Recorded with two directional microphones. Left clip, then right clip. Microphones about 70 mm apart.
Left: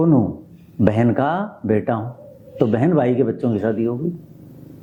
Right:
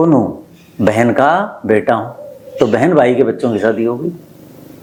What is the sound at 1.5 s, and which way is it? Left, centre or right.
Speech, right.